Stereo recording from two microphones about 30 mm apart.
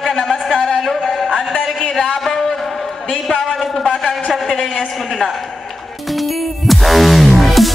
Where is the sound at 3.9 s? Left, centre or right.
Centre.